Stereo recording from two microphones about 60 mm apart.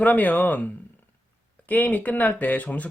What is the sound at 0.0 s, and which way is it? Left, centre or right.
Speech, left.